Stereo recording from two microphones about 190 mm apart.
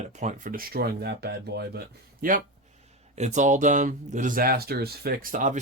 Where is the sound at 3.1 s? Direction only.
40° right (ahead or behind).